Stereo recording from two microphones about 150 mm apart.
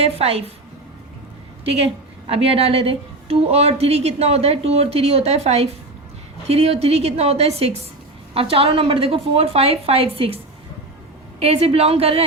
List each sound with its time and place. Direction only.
0.0 s a woman's voice: 40° right (ahead or behind)
2.2 s a woman's voice: 40° right (ahead or behind)